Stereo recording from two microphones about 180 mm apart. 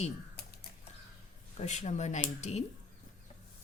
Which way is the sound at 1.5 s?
40° left (ahead or behind).